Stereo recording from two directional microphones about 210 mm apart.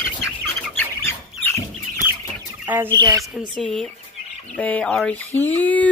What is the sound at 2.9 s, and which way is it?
Speech, 20° right (ahead or behind).